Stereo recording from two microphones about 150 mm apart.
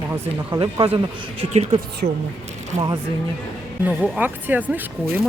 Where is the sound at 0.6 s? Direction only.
35° right (ahead or behind).